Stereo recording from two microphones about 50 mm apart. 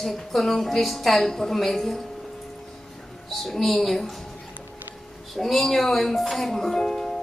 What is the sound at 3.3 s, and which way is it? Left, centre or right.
Speech, centre.